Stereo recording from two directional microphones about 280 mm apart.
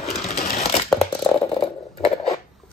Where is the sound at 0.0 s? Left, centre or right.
Left.